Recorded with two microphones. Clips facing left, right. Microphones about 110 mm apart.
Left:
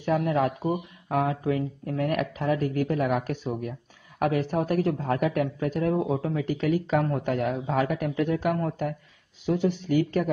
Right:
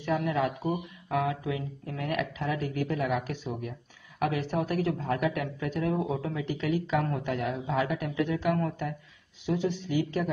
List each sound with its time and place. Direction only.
0.0 s speech: 40° left (ahead or behind)